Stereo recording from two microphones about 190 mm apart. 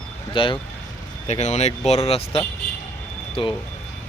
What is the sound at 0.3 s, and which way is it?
Speech, 25° left (ahead or behind).